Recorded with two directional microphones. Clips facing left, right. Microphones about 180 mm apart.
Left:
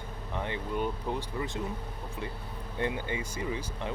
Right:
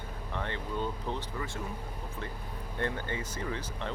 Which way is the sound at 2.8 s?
15° left (ahead or behind).